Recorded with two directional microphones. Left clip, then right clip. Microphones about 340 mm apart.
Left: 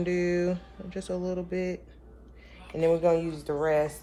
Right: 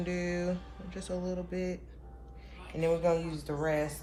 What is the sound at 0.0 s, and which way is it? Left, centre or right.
Speech, left.